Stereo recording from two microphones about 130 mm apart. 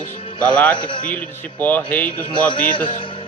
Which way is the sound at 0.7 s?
40° left (ahead or behind).